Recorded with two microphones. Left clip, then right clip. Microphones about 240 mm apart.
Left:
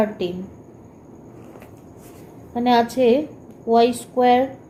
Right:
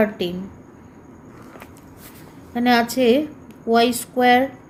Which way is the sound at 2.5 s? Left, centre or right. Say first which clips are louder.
Even; right.